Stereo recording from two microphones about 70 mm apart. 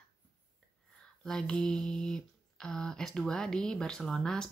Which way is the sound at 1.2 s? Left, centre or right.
Centre.